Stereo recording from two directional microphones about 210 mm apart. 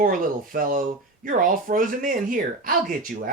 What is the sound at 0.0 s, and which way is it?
Speech, 40° right (ahead or behind).